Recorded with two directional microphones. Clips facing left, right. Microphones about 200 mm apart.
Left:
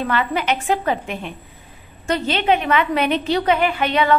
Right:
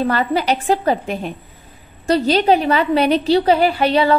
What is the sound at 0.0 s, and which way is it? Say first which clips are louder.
A woman's voice: right 4 dB; 35° right (ahead or behind).